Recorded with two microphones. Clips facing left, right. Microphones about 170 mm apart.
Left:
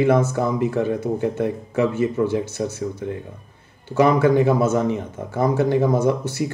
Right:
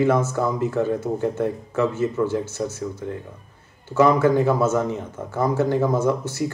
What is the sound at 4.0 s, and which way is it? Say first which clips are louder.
Speech: left 1 dB; 20° left (ahead or behind).